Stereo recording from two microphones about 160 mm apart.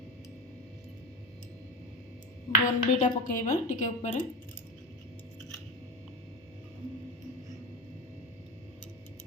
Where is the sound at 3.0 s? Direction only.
55° left (ahead or behind).